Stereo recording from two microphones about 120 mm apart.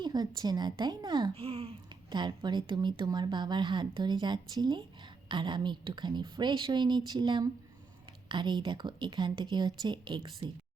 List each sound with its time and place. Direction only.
0.0 s speech: 35° right (ahead or behind)
1.3 s a sound: 55° right (ahead or behind)
2.0 s speech: 40° right (ahead or behind)